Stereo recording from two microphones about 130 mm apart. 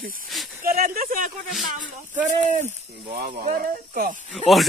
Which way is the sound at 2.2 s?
70° right (ahead or behind).